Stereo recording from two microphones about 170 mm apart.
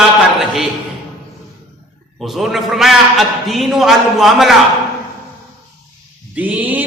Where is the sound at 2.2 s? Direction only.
Centre (ahead or behind).